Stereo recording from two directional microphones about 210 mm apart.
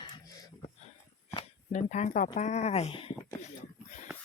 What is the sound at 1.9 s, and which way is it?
Speech, 35° left (ahead or behind).